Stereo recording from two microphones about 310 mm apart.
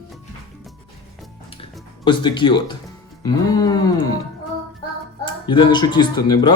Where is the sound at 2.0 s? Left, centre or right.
Centre.